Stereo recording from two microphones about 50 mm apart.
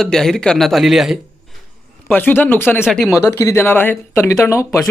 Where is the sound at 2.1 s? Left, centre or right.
Left.